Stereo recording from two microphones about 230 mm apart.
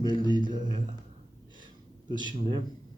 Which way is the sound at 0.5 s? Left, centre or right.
Centre.